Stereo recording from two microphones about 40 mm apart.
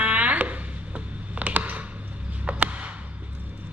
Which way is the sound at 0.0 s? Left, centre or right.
Right.